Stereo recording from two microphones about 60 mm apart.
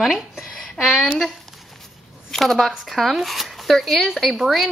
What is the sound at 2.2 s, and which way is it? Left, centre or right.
A woman's voice, centre.